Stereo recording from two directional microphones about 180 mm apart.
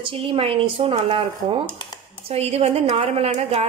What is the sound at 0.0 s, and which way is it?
A woman's voice, 30° right (ahead or behind).